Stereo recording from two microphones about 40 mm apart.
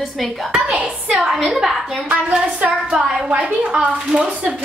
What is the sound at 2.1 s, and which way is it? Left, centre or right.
Speech, right.